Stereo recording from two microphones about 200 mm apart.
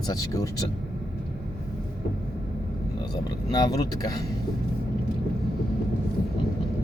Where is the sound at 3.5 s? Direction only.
20° left (ahead or behind).